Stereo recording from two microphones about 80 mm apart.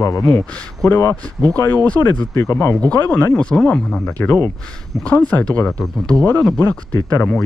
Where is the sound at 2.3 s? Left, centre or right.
Left.